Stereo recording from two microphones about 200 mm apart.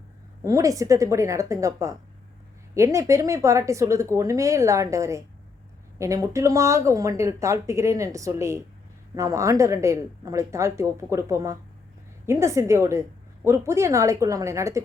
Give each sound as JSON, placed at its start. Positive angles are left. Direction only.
{"t": 0.4, "sound": "speech", "side_deg": -15}